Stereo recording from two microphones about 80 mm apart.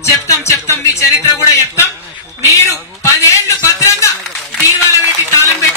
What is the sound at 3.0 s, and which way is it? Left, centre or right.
Speech, left.